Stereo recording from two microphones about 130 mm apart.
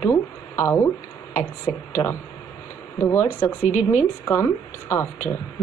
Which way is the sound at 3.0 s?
20° left (ahead or behind).